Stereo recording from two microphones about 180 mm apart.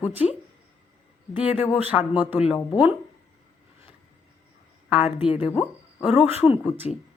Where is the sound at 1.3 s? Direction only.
35° left (ahead or behind).